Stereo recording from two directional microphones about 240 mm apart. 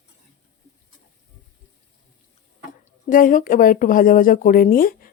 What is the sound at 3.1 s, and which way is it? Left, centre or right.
Speech, left.